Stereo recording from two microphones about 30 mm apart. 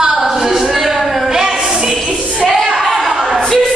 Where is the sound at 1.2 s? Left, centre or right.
Centre.